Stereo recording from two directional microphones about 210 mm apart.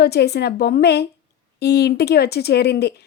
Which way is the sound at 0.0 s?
50° left (ahead or behind).